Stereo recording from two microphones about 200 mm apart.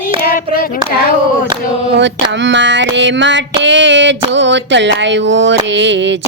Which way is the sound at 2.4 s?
65° right (ahead or behind).